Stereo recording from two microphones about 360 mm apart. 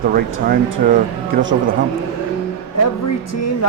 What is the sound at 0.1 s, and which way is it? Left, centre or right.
Speech, right.